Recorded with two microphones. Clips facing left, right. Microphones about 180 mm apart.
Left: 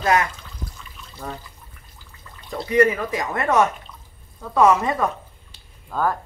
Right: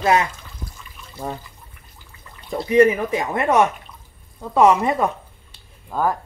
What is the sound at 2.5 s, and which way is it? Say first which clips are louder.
A man's voice: right 3 dB; 20° right (ahead or behind).